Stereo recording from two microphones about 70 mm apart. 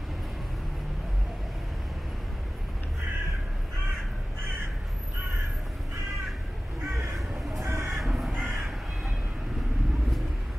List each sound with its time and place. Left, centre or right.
7.2 s a sound: centre
7.6 s crow: right
8.0 s crow: centre